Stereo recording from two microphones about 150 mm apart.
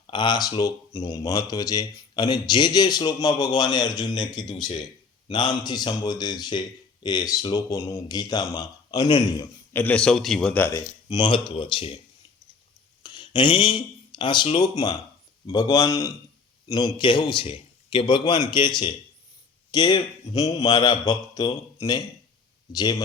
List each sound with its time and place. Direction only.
0.1 s speech: 30° left (ahead or behind)
9.7 s a man's voice: 10° left (ahead or behind)
10.6 s a man's voice: 20° left (ahead or behind)
13.0 s a man's voice: 30° left (ahead or behind)